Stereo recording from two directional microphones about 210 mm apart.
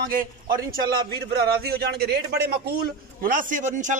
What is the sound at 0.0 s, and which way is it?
A man's voice, 45° right (ahead or behind).